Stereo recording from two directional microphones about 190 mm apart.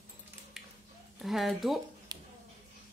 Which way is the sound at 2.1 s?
20° right (ahead or behind).